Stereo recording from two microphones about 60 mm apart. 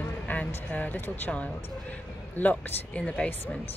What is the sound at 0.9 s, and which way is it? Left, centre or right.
Speech, left.